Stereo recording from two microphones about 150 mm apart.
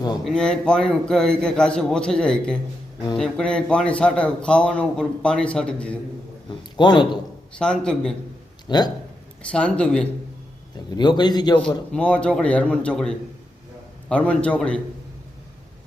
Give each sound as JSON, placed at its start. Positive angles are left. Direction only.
{"t": 0.3, "sound": "a man's voice", "side_deg": 5}
{"t": 6.5, "sound": "a sound", "side_deg": 30}
{"t": 7.6, "sound": "a man's voice", "side_deg": 5}
{"t": 8.6, "sound": "a man's voice", "side_deg": 30}
{"t": 9.4, "sound": "speech", "side_deg": 10}
{"t": 10.9, "sound": "a man's voice", "side_deg": 30}
{"t": 11.9, "sound": "speech", "side_deg": 5}